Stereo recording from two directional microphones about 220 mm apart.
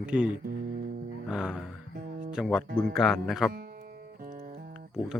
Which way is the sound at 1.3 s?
5° right (ahead or behind).